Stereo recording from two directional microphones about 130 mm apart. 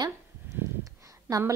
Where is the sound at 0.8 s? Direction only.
25° right (ahead or behind).